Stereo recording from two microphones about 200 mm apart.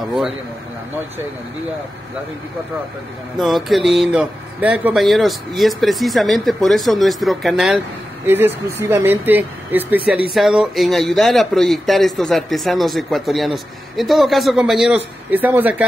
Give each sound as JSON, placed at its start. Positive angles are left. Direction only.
{"t": 0.0, "sound": "a man's voice", "side_deg": 0}
{"t": 3.3, "sound": "a man's voice", "side_deg": 0}